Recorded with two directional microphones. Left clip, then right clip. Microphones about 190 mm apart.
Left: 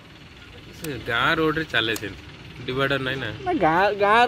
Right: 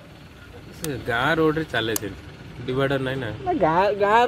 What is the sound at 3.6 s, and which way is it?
Speech, 20° left (ahead or behind).